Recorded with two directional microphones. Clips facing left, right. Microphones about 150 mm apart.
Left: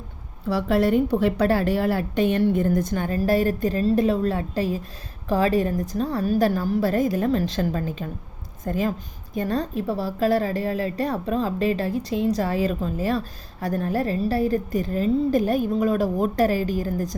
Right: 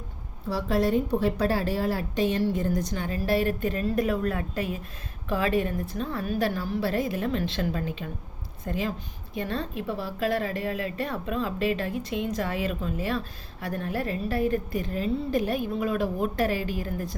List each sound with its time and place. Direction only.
0.5 s a woman's voice: 65° left (ahead or behind); by 17.2 s 40° left (ahead or behind)